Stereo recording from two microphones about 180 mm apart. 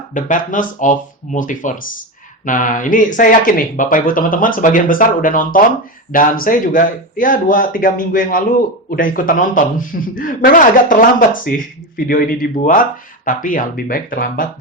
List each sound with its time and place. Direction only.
0.1 s a man's voice: 45° left (ahead or behind)